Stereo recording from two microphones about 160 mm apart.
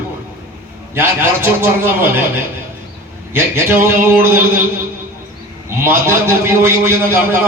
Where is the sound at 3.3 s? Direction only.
15° right (ahead or behind).